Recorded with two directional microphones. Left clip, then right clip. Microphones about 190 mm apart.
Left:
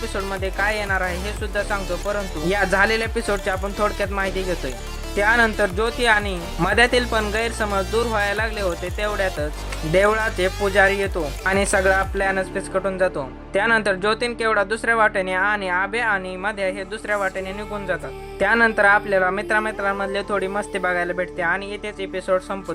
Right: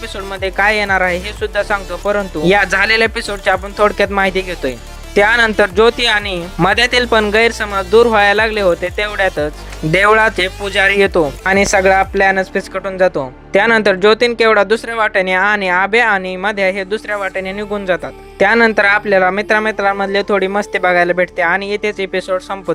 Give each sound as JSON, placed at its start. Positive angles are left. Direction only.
{"t": 0.3, "sound": "speech", "side_deg": -40}
{"t": 11.5, "sound": "speech", "side_deg": -30}